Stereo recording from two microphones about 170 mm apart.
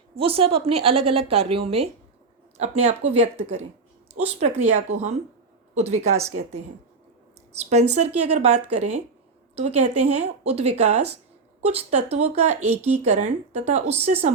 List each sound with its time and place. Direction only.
0.2 s speech: 35° right (ahead or behind)
7.6 s speech: 40° right (ahead or behind)